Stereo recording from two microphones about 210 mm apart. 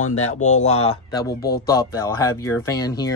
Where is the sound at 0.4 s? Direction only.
35° left (ahead or behind).